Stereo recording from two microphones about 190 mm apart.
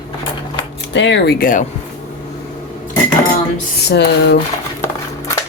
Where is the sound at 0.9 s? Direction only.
70° left (ahead or behind); by 1.7 s 45° left (ahead or behind).